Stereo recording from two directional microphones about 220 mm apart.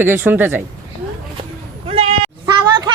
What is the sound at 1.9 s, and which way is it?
Sheep, 25° right (ahead or behind).